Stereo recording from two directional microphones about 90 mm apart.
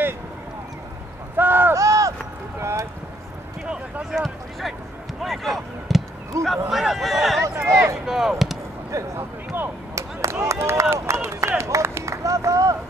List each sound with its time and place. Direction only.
1.3 s a sound: 25° right (ahead or behind)
1.8 s run: 35° right (ahead or behind)
2.6 s a sound: 35° right (ahead or behind)
3.6 s a sound: 5° right (ahead or behind)
5.2 s speech: centre (ahead or behind)
6.4 s speech: 35° right (ahead or behind)
6.7 s speech: centre (ahead or behind)
7.4 s speech: 30° right (ahead or behind)
8.0 s speech: 5° right (ahead or behind)
8.9 s speech: 35° right (ahead or behind)
9.9 s a sound: 35° right (ahead or behind)
11.4 s speech: 35° right (ahead or behind)